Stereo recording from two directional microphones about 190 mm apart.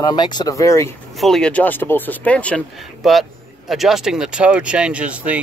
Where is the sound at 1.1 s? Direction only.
Centre (ahead or behind).